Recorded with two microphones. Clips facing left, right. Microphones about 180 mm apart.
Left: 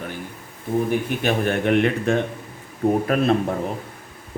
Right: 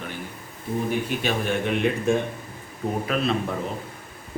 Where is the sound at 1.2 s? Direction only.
60° left (ahead or behind).